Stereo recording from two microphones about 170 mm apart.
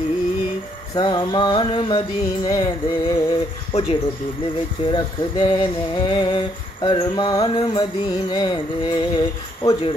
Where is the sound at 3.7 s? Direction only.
40° left (ahead or behind).